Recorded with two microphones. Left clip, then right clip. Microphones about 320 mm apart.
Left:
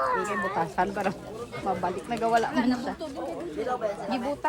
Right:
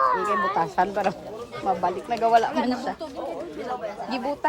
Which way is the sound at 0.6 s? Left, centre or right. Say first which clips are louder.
Right 4 dB; right.